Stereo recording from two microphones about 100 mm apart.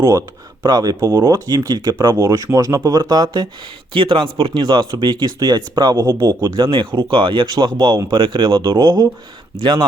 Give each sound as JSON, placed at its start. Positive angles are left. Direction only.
{"t": 0.0, "sound": "speech", "side_deg": -35}
{"t": 3.9, "sound": "speech", "side_deg": -55}
{"t": 6.6, "sound": "speech", "side_deg": -55}